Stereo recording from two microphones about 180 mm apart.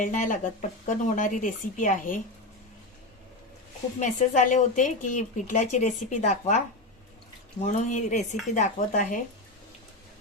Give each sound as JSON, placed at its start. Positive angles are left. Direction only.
{"t": 0.0, "sound": "speech", "side_deg": 45}
{"t": 4.0, "sound": "speech", "side_deg": 45}
{"t": 7.6, "sound": "speech", "side_deg": 45}